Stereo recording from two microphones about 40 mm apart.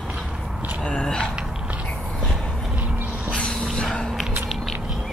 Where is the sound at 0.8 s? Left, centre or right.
Centre.